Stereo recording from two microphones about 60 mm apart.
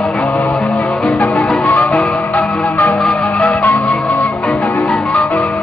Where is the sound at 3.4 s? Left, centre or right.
Left.